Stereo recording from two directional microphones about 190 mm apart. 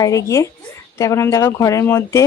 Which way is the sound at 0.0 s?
15° left (ahead or behind).